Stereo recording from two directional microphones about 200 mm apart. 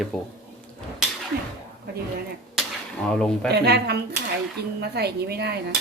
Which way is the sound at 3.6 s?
55° right (ahead or behind).